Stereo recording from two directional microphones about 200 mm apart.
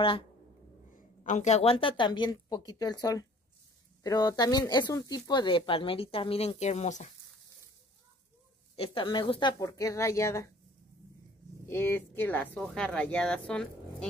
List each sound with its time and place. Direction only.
1.2 s speech: 35° left (ahead or behind)
8.7 s speech: 25° left (ahead or behind)
11.6 s speech: 10° left (ahead or behind)